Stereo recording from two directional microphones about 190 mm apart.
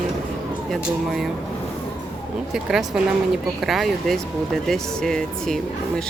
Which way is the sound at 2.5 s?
Centre (ahead or behind).